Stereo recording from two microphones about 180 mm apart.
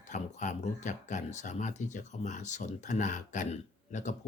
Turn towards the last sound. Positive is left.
turn(degrees=40)  # may be behind; listen again after turning